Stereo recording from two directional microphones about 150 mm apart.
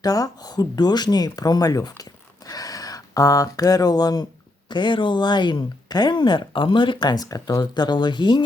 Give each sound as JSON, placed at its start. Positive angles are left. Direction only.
{"t": 0.0, "sound": "speech", "side_deg": 25}